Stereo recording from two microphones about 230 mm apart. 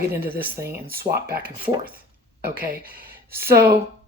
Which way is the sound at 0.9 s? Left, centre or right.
Right.